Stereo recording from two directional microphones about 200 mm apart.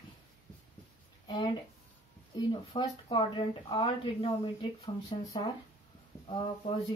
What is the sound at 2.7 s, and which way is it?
A woman's voice, 25° left (ahead or behind).